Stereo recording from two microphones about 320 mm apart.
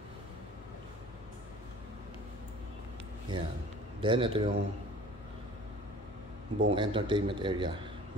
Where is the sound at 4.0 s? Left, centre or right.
Centre.